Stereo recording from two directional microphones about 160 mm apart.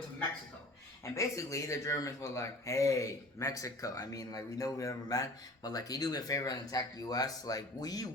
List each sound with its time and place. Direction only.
1.0 s speech: 20° left (ahead or behind)